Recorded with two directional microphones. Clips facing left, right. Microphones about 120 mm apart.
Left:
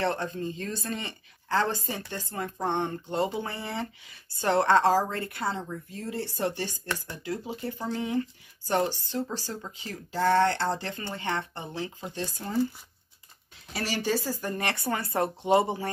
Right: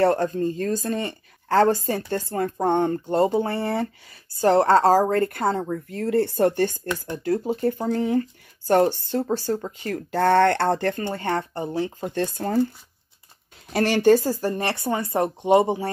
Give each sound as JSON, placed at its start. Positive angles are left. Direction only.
{"t": 0.0, "sound": "speech", "side_deg": -45}
{"t": 4.1, "sound": "speech", "side_deg": -30}
{"t": 12.1, "sound": "speech", "side_deg": -55}
{"t": 13.7, "sound": "speech", "side_deg": -55}
{"t": 14.5, "sound": "speech", "side_deg": -25}